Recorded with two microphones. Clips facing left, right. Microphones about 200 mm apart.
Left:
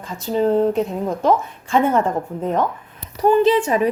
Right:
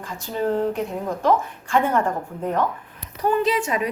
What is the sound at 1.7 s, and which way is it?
A woman's voice, 25° left (ahead or behind).